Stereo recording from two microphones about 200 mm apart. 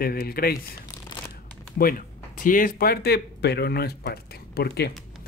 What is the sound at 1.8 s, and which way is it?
Speech, 45° left (ahead or behind).